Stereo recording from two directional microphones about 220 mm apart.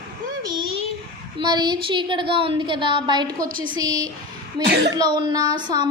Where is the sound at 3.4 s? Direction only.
40° right (ahead or behind).